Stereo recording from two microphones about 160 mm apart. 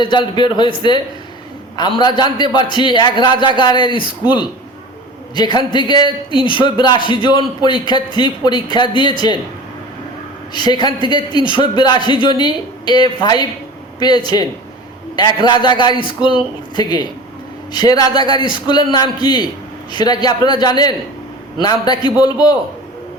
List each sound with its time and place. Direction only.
0.0 s speech: 30° left (ahead or behind)
5.5 s speech: 30° left (ahead or behind)
10.5 s speech: 25° left (ahead or behind)